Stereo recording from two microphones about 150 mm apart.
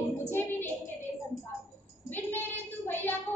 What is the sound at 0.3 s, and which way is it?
Child singing, 15° left (ahead or behind).